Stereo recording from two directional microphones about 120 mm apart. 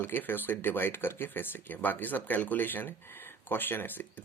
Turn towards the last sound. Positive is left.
turn(degrees=15)  # may be behind; listen again after turning